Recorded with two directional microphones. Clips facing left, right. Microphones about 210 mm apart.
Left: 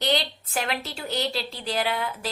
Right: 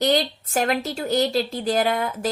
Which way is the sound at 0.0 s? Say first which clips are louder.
Right 5 dB; 45° right (ahead or behind).